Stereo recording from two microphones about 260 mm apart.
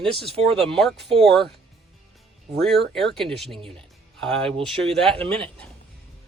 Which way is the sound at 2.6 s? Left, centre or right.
Centre.